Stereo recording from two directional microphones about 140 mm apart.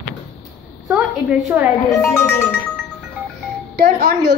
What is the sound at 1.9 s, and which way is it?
Speech, 20° left (ahead or behind).